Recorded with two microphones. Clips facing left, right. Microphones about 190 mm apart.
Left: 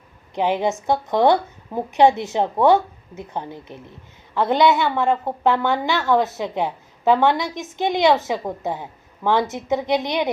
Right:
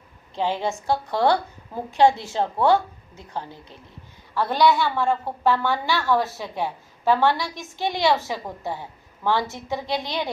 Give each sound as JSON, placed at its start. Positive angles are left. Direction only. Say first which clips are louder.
{"t": 0.3, "sound": "a woman's voice", "louder": "left 4 dB", "side_deg": 20}